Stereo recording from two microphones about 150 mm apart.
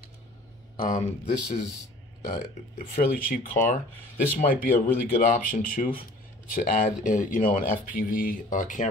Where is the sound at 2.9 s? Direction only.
65° left (ahead or behind).